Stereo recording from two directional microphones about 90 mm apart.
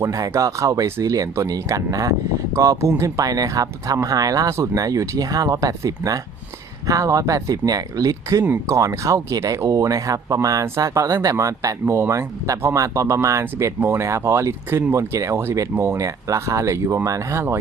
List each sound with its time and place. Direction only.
0.0 s speech: 40° right (ahead or behind)